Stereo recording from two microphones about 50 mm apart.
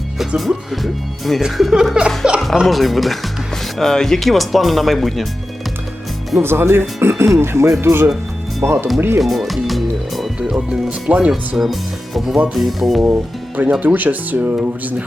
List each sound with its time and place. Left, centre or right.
0.3 s speech: centre
1.7 s music: centre
2.6 s speech: centre
6.4 s speech: right
8.6 s speech: right
9.2 s speech: centre
10.5 s speech: centre
11.3 s speech: centre
13.6 s speech: right